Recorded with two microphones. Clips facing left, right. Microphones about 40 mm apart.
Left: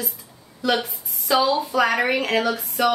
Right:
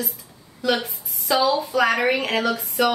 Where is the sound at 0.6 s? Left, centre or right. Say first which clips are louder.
Even; centre.